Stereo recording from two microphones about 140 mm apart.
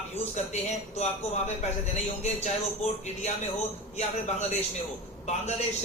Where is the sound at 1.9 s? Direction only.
50° left (ahead or behind).